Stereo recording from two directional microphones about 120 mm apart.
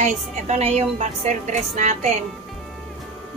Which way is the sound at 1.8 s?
75° right (ahead or behind).